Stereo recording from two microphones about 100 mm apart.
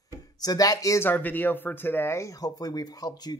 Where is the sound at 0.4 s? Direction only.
40° left (ahead or behind).